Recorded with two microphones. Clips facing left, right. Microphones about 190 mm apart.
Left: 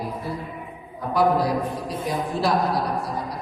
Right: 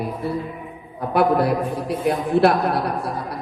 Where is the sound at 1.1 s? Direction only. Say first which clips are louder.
Right 2 dB; 60° right (ahead or behind).